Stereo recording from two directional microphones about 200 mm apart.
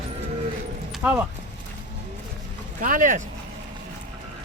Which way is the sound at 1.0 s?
10° right (ahead or behind).